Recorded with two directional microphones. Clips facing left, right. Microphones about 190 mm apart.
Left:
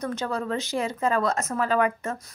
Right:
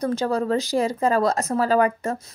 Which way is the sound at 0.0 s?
35° right (ahead or behind).